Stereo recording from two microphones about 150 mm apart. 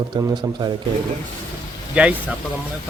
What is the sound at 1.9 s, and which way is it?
Speech, 10° right (ahead or behind).